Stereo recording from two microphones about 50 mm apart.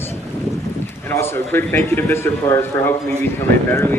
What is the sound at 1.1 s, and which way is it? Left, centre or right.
Speech, left.